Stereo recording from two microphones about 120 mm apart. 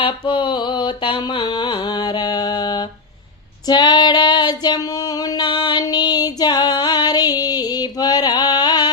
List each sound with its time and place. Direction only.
0.0 s mantra: 45° left (ahead or behind)
3.7 s female singing: 35° left (ahead or behind)